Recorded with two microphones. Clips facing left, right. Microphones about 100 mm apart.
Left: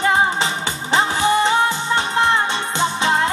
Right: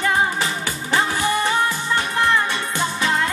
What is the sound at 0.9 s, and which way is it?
Music, 20° left (ahead or behind).